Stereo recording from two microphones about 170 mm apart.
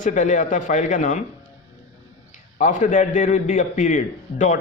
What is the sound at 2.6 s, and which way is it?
Speech, 45° left (ahead or behind).